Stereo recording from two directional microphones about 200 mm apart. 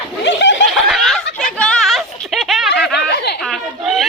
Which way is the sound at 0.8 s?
Centre (ahead or behind).